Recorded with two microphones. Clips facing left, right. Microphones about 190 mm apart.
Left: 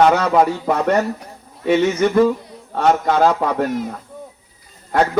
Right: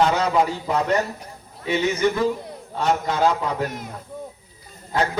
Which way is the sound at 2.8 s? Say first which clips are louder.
Left 6 dB; 70° left (ahead or behind).